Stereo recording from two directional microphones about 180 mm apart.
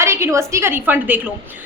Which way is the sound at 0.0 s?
15° right (ahead or behind).